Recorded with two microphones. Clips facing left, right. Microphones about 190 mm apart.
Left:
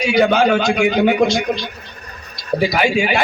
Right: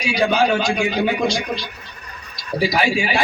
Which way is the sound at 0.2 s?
65° left (ahead or behind).